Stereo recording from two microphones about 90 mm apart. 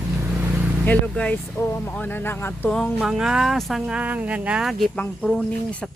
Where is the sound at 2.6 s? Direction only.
10° left (ahead or behind).